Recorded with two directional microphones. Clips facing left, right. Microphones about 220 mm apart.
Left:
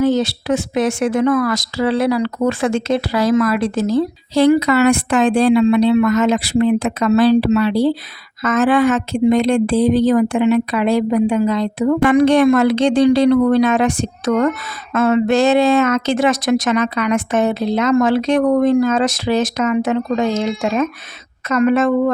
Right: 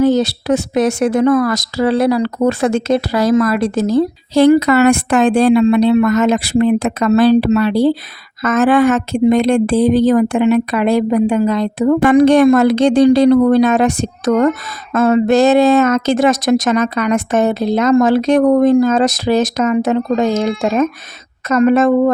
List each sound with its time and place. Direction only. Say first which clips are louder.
0.0 s speech: right 3 dB; 40° right (ahead or behind)